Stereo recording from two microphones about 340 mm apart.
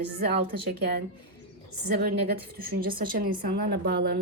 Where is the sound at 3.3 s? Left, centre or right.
Right.